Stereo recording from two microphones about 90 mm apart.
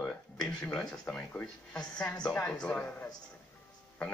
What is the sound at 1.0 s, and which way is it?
Speech, 10° left (ahead or behind).